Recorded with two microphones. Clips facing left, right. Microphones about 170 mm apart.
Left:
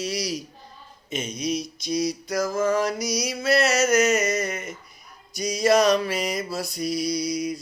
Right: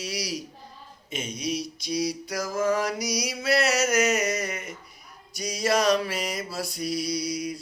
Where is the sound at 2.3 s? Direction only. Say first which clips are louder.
Left 3 dB; 10° right (ahead or behind).